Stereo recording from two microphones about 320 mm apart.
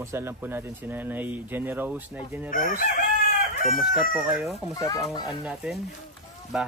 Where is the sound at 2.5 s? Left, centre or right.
Left.